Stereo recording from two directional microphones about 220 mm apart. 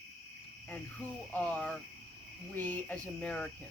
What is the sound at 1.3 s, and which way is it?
Cricket, 5° left (ahead or behind).